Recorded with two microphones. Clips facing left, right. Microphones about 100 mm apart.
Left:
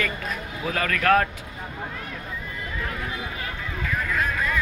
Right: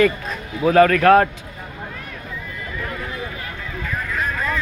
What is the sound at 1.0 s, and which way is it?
Speech, 30° right (ahead or behind).